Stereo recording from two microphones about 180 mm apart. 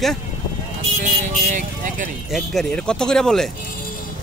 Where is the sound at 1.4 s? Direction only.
45° right (ahead or behind).